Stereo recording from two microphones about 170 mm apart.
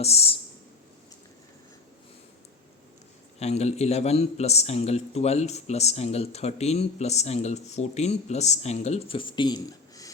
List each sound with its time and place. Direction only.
0.0 s speech: 35° left (ahead or behind)
3.4 s a man's voice: 40° left (ahead or behind); by 10.1 s 20° left (ahead or behind)